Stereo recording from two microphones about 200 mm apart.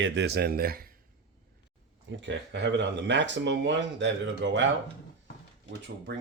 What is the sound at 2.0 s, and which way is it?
Speech, 60° right (ahead or behind).